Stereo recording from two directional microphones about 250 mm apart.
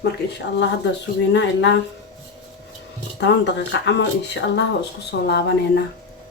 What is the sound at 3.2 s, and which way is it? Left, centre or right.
A woman's voice, left.